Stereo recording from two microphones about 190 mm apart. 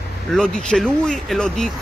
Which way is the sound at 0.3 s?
5° left (ahead or behind).